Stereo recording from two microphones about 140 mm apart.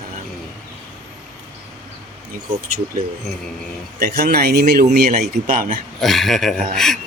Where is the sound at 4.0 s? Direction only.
70° right (ahead or behind); by 5.6 s 90° right.